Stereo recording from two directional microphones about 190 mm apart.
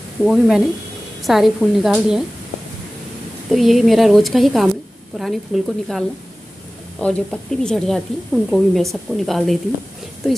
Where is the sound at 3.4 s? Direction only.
Centre (ahead or behind).